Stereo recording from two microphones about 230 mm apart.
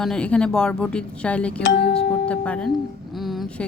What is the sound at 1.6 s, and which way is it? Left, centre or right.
Speech, left.